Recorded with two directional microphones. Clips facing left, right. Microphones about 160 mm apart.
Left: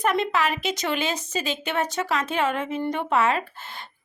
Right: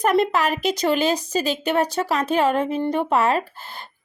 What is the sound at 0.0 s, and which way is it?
Speech, 40° right (ahead or behind).